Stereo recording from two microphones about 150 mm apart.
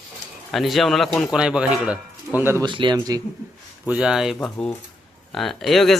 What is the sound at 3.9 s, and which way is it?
Speech, 5° right (ahead or behind).